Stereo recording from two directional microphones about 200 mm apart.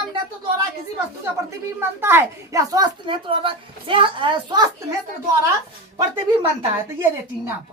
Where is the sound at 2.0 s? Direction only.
10° right (ahead or behind).